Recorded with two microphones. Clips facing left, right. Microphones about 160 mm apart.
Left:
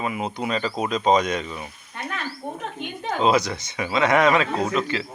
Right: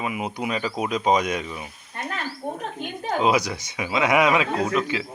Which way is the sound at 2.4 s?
10° right (ahead or behind).